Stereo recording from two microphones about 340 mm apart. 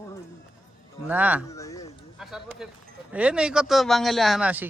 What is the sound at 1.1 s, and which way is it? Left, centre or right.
Speech, centre.